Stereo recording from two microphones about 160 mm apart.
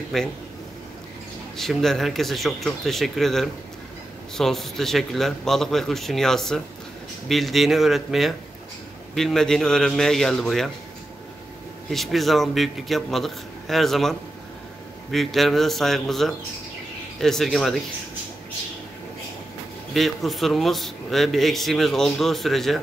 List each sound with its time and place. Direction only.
0.1 s speech: centre (ahead or behind)
1.6 s speech: centre (ahead or behind)
11.9 s speech: centre (ahead or behind)
19.9 s speech: centre (ahead or behind)